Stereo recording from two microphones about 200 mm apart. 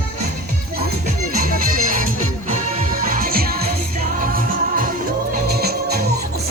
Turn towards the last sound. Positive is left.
turn(degrees=-50)  # may be behind; listen again after turning